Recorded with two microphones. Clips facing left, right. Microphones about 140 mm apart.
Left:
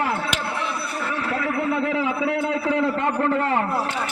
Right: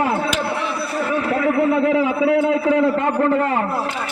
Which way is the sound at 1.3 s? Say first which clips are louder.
Right 6 dB; 20° right (ahead or behind).